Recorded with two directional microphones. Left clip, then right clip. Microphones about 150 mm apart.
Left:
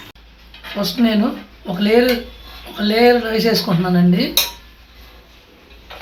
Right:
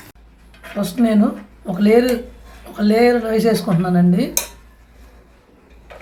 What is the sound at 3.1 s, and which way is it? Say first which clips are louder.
Speech: left 2 dB; 10° right (ahead or behind).